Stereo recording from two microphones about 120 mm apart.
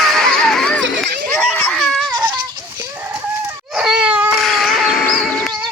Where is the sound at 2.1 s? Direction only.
40° right (ahead or behind).